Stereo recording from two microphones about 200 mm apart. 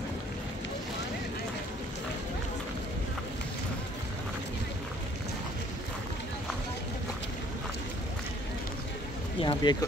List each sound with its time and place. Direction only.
9.4 s speech: 25° left (ahead or behind)